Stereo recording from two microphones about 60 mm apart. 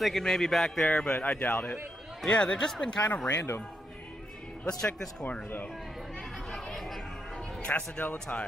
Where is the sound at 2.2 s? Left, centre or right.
Centre.